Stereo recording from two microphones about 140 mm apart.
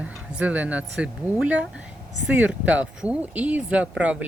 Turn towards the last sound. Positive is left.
turn(degrees=-10)  # may be behind; listen again after turning